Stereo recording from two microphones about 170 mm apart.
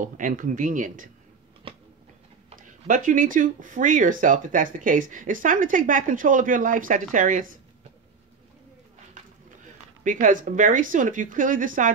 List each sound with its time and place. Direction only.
0.0 s speech: 50° right (ahead or behind)
2.9 s speech: 50° right (ahead or behind)
10.0 s speech: 50° right (ahead or behind)